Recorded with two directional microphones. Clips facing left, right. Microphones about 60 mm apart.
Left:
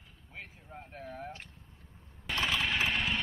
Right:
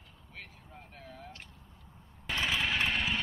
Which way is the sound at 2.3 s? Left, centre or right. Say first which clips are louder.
Even; centre.